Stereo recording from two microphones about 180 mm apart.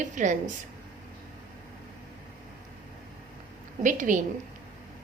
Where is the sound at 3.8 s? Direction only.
45° right (ahead or behind).